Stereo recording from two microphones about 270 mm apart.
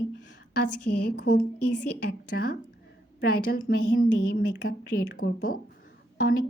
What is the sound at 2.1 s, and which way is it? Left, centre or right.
Speech, left.